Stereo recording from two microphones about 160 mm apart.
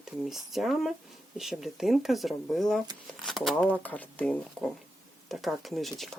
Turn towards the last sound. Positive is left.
turn(degrees=0)  # may be behind; listen again after turning